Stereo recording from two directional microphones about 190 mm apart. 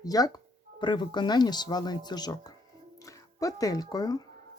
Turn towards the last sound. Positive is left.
turn(degrees=20)  # may be behind; listen again after turning